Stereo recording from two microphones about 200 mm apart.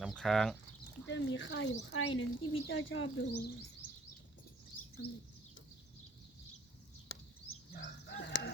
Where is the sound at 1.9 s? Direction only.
85° left.